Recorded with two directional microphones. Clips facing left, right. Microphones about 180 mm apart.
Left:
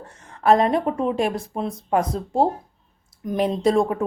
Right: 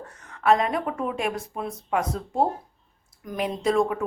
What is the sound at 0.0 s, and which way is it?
A woman's voice, 30° left (ahead or behind).